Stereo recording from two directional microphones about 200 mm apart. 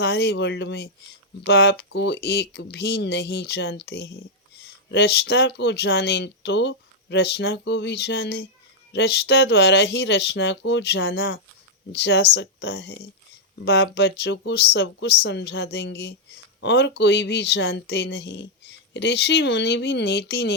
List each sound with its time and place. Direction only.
0.0 s speech: 55° left (ahead or behind)